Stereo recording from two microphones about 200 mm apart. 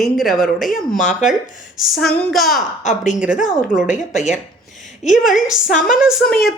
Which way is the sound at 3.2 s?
5° right (ahead or behind).